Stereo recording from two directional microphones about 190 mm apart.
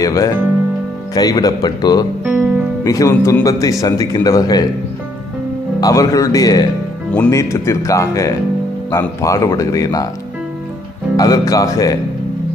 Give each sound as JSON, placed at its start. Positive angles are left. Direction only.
{"t": 0.0, "sound": "speech", "side_deg": 20}
{"t": 2.2, "sound": "music", "side_deg": -10}
{"t": 2.8, "sound": "speech", "side_deg": 15}
{"t": 5.8, "sound": "speech", "side_deg": 20}
{"t": 11.1, "sound": "speech", "side_deg": 20}